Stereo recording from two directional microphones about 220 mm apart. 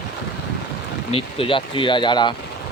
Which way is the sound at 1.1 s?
25° left (ahead or behind).